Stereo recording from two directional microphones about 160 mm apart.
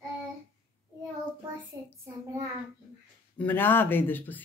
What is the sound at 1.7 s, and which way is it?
Child singing, 20° right (ahead or behind).